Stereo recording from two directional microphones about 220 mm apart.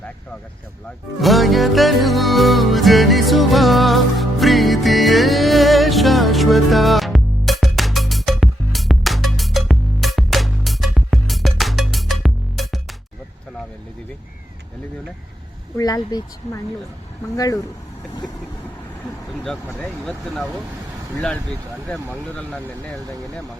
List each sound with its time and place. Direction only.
1.2 s music: centre (ahead or behind)
15.8 s speech: 15° left (ahead or behind)
17.3 s speech: 15° left (ahead or behind)
19.5 s speech: centre (ahead or behind)
21.8 s speech: 5° left (ahead or behind)